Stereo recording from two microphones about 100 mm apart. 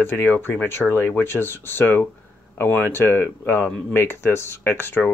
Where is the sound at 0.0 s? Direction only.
20° left (ahead or behind).